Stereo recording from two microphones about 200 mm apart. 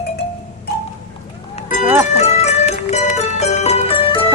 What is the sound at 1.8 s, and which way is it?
Music, 10° right (ahead or behind).